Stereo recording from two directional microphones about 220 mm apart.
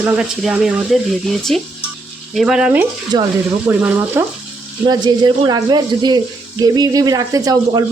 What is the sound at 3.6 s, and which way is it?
Speech, 10° right (ahead or behind).